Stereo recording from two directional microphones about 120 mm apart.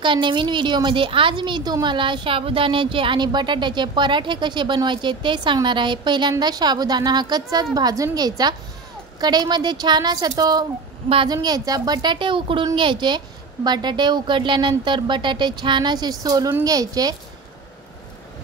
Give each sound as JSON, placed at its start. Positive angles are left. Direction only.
{"t": 0.0, "sound": "a woman's voice", "side_deg": -40}